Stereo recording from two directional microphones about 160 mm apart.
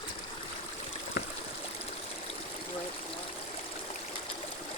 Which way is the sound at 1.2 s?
90° left.